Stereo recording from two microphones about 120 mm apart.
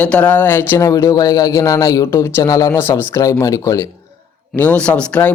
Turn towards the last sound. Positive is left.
turn(degrees=10)  # may be behind; listen again after turning